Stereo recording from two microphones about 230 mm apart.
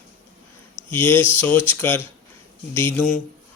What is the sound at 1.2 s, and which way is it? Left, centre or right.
Speech, centre.